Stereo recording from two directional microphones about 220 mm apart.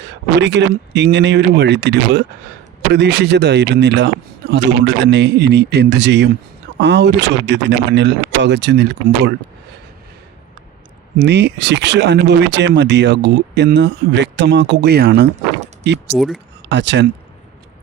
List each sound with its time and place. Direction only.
0.0 s speech: 50° right (ahead or behind)
11.2 s speech: 50° right (ahead or behind)
16.1 s speech: centre (ahead or behind)
16.6 s speech: 50° right (ahead or behind)